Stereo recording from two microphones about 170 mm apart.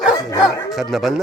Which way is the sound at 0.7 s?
Centre (ahead or behind).